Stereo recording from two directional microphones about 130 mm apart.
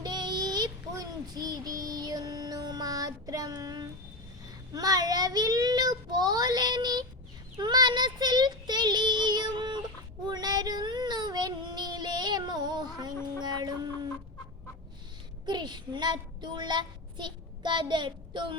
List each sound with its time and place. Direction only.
0.0 s child singing: 35° right (ahead or behind)
4.7 s a child's voice: 30° right (ahead or behind)
7.6 s child singing: 35° right (ahead or behind)
13.4 s a sound: 35° right (ahead or behind)
15.4 s a child's voice: 35° right (ahead or behind)